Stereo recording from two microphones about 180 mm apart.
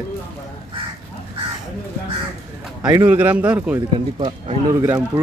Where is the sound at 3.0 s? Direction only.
10° right (ahead or behind).